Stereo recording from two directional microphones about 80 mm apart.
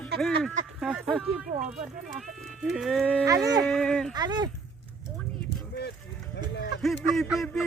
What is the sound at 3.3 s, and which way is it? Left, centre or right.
Speech, right.